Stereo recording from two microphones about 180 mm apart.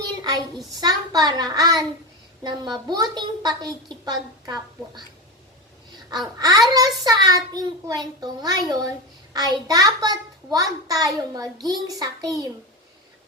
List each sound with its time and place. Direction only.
0.8 s a child's voice: 20° right (ahead or behind)
6.1 s a child's voice: 20° right (ahead or behind)